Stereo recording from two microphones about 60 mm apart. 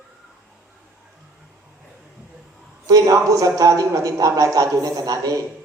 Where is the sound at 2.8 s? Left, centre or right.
Right.